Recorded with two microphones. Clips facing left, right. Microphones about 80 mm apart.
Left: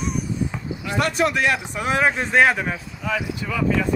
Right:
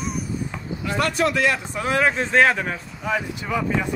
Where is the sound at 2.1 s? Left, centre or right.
Centre.